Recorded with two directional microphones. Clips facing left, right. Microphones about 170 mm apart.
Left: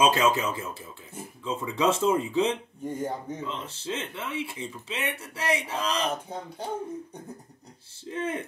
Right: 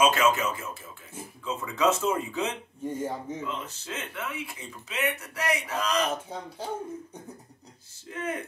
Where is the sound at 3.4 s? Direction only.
30° left (ahead or behind).